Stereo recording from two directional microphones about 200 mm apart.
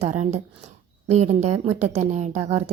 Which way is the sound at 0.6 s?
35° right (ahead or behind).